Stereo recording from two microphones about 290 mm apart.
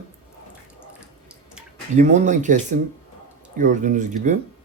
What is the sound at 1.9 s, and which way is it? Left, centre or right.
Speech, right.